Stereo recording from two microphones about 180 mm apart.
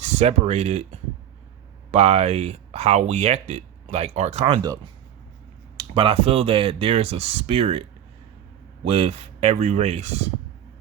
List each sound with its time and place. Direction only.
0.0 s speech: 40° right (ahead or behind)
5.7 s speech: 30° right (ahead or behind)
8.9 s speech: 35° right (ahead or behind)